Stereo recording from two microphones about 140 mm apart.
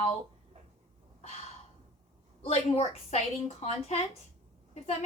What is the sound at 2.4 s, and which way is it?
A woman's voice, 50° left (ahead or behind).